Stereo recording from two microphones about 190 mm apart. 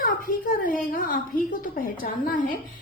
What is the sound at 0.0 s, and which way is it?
A woman's voice, 45° left (ahead or behind).